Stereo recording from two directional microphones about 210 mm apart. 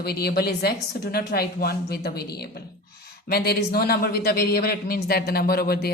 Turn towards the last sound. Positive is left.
turn(degrees=50)  # may be behind; listen again after turning